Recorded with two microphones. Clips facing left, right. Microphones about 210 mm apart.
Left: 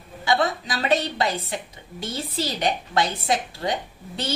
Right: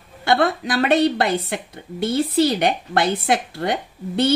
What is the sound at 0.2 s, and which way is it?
A woman's voice, 60° right (ahead or behind).